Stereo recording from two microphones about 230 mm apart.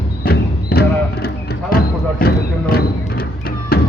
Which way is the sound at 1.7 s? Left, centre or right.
Left.